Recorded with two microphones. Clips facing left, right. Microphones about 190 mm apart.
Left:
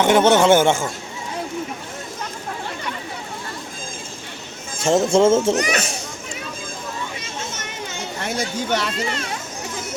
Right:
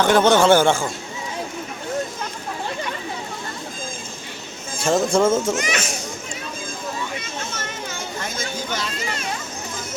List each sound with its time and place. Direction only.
0.0 s speech: 25° left (ahead or behind)
4.8 s speech: 25° left (ahead or behind)
8.2 s speech: 70° left (ahead or behind)